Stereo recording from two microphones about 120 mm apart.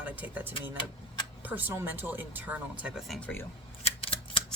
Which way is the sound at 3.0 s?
Centre (ahead or behind).